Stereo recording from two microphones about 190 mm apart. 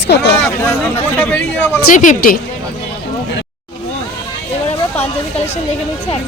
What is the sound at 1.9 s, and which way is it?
Speech, 45° left (ahead or behind).